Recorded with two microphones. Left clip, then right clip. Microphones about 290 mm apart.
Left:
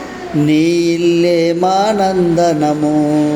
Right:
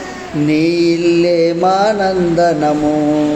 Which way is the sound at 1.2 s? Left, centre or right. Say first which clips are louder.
Even; left.